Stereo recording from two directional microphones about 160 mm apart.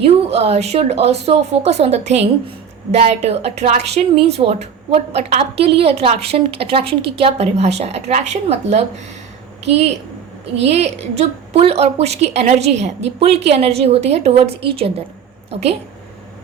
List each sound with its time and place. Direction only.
0.0 s a woman's voice: 40° right (ahead or behind)